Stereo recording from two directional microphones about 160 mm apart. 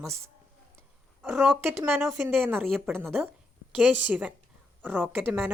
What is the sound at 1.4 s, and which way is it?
A woman's voice, 15° right (ahead or behind).